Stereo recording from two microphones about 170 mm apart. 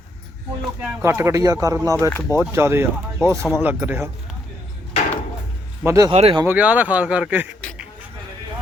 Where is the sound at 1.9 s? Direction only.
15° left (ahead or behind).